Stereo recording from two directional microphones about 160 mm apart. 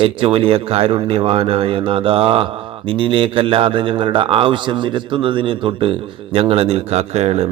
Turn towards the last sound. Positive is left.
turn(degrees=-40)  # may be behind; listen again after turning